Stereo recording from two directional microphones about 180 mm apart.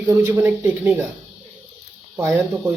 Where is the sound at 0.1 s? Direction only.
10° right (ahead or behind).